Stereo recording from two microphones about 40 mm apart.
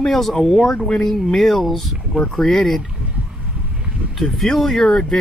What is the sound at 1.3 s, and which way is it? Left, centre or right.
Speech, centre.